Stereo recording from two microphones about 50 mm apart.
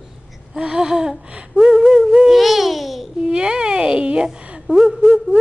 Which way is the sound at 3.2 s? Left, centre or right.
Centre.